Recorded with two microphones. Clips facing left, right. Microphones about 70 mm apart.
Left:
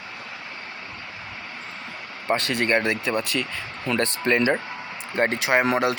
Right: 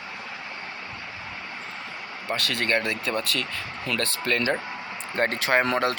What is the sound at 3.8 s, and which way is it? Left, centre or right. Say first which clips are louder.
Speech: left 5 dB; left.